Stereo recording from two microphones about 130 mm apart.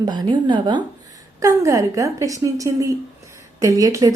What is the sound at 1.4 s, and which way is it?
A woman's voice, 25° right (ahead or behind).